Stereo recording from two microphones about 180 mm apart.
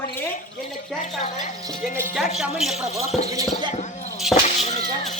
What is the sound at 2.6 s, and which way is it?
Speech, centre (ahead or behind).